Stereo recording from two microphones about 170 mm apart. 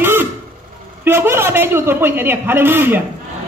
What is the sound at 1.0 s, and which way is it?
A man's voice, 15° right (ahead or behind).